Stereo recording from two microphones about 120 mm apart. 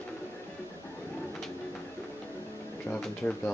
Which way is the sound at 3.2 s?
5° left (ahead or behind).